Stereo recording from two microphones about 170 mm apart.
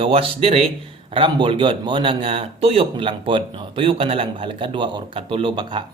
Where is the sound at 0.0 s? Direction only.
35° right (ahead or behind).